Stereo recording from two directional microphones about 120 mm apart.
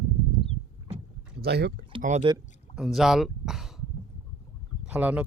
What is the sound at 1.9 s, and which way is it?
Rowboat, 45° right (ahead or behind).